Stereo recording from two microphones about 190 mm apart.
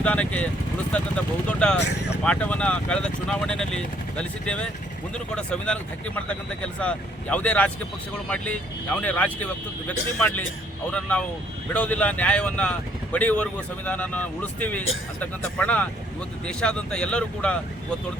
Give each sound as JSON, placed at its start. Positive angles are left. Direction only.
{"t": 0.0, "sound": "a man's voice", "side_deg": 5}
{"t": 1.8, "sound": "speech", "side_deg": 60}
{"t": 2.2, "sound": "a man's voice", "side_deg": 5}